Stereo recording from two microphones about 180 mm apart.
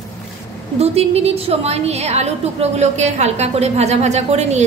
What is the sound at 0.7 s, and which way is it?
A woman's voice, 35° right (ahead or behind).